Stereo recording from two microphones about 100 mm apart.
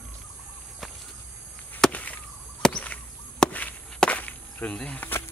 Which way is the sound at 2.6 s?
10° left (ahead or behind).